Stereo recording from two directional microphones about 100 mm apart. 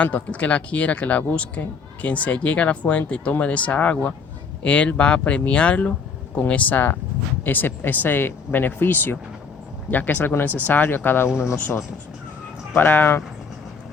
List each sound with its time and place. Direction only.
0.0 s speech: 15° left (ahead or behind)